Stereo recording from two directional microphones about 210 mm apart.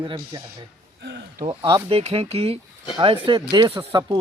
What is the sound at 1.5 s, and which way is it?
A man's voice, 20° right (ahead or behind).